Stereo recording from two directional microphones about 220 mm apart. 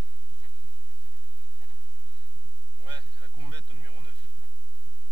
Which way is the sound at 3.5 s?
20° right (ahead or behind).